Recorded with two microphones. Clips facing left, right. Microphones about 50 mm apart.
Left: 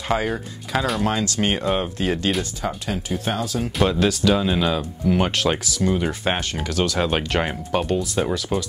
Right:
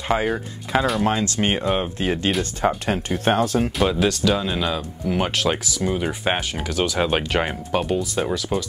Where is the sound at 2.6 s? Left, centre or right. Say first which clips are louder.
Right 5 dB; right.